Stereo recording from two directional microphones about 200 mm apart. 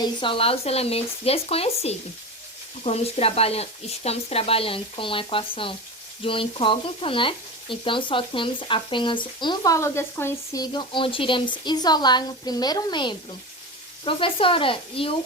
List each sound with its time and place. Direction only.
0.0 s speech: 25° left (ahead or behind)